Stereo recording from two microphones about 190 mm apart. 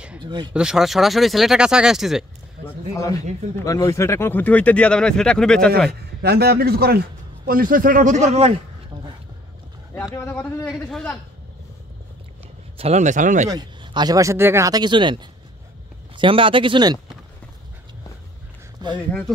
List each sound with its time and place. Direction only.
0.2 s speech: 25° right (ahead or behind)
0.5 s speech: 5° right (ahead or behind)
2.6 s speech: 15° left (ahead or behind)
5.9 s a man's voice: 55° right (ahead or behind); by 8.5 s 35° right (ahead or behind)
10.1 s speech: 10° left (ahead or behind)
12.7 s speech: 35° right (ahead or behind)
13.5 s speech: 20° right (ahead or behind)